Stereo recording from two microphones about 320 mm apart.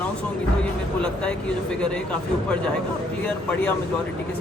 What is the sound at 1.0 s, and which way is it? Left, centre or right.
Speech, centre.